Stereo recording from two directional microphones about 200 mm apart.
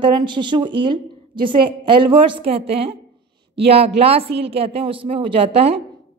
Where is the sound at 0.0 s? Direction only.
25° right (ahead or behind).